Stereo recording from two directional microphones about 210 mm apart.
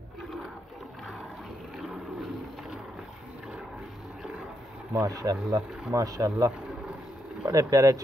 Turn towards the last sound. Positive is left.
turn(degrees=-15)  # may be behind; listen again after turning